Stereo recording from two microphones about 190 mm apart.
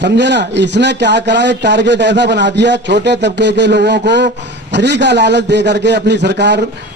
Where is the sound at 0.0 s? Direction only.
65° right (ahead or behind).